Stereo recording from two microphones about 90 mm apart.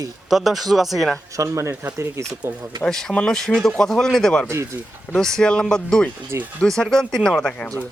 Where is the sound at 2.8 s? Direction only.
10° left (ahead or behind).